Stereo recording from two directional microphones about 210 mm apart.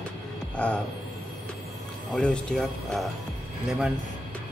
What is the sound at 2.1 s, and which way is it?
Speech, 5° left (ahead or behind).